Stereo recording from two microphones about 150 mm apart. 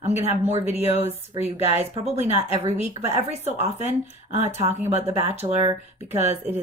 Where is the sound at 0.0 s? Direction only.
45° right (ahead or behind).